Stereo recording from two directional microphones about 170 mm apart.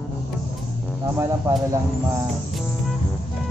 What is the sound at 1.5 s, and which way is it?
Speech, 15° right (ahead or behind).